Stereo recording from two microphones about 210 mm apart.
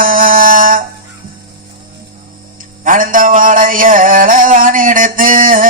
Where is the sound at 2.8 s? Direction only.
40° right (ahead or behind).